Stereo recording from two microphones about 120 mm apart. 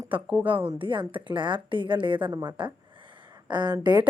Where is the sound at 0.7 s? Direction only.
45° right (ahead or behind).